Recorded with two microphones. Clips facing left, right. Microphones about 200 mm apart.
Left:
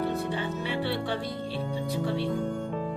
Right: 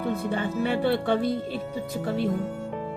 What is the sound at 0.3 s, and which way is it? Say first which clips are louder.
Speech: right 5 dB; 50° right (ahead or behind).